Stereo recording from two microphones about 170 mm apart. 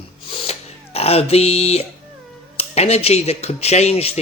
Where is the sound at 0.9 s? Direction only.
35° left (ahead or behind).